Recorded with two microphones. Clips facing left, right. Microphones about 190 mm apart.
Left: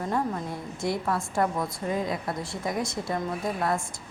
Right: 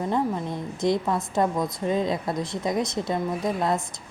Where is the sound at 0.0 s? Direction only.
20° right (ahead or behind).